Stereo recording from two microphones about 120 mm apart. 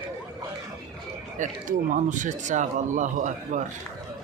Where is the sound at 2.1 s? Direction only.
90° right.